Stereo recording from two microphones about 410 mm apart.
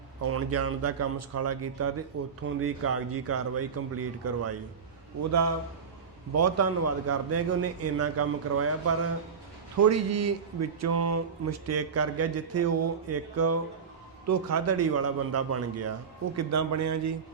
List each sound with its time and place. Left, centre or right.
0.2 s a man's voice: right